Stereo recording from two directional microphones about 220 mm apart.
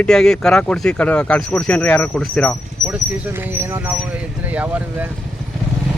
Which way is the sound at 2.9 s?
10° right (ahead or behind).